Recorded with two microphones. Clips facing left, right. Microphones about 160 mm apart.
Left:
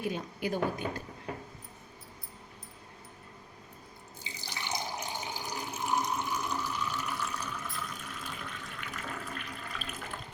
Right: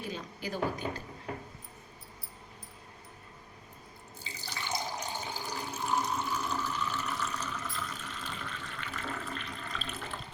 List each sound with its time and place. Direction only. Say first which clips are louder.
0.0 s speech: left 5 dB; 60° left (ahead or behind)
4.2 s water: even; 15° left (ahead or behind)